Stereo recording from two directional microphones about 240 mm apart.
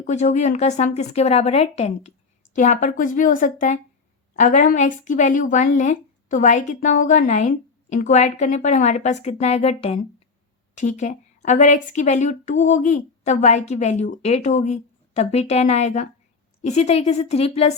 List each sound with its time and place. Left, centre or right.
0.1 s a woman's voice: left